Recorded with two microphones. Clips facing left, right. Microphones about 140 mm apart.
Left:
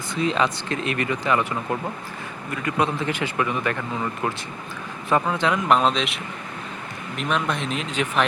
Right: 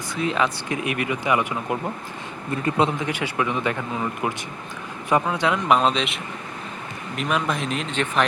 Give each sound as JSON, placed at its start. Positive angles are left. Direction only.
{"t": 0.2, "sound": "a man's voice", "side_deg": -5}
{"t": 3.1, "sound": "speech", "side_deg": -10}
{"t": 7.2, "sound": "speech", "side_deg": 0}